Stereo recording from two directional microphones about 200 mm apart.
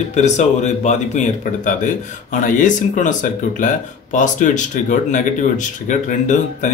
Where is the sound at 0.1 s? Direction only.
35° left (ahead or behind).